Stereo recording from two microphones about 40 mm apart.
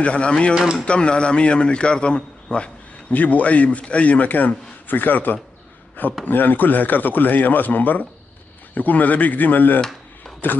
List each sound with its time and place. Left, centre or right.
0.0 s a man's voice: left
3.1 s a man's voice: left